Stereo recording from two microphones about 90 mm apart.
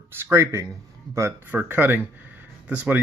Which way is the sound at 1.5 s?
20° right (ahead or behind).